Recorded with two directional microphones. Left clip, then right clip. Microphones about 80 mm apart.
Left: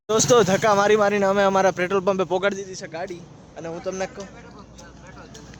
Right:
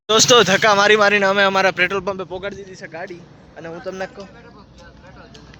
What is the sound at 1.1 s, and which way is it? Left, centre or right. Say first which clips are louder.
Speech: right 4 dB; left.